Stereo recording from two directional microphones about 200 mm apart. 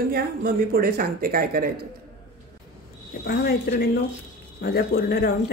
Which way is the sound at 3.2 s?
50° left (ahead or behind).